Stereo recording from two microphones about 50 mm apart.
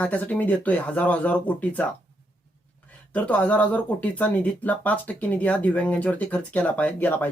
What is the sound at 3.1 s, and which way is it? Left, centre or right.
Speech, left.